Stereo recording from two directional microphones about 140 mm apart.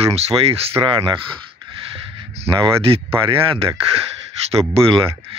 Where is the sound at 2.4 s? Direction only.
35° right (ahead or behind).